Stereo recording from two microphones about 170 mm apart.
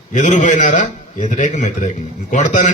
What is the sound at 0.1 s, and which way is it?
A man's voice, 45° left (ahead or behind).